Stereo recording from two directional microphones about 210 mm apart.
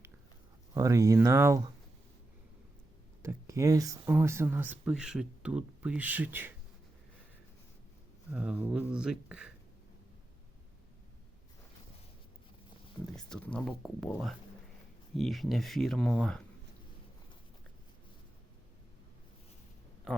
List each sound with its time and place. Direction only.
0.7 s speech: 15° right (ahead or behind)
3.2 s speech: 15° right (ahead or behind)
8.3 s speech: 5° right (ahead or behind)
13.1 s speech: 5° left (ahead or behind)